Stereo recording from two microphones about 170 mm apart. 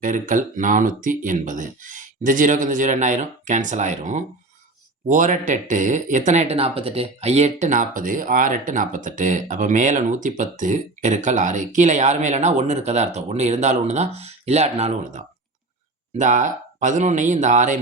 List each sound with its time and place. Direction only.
0.0 s speech: 50° right (ahead or behind)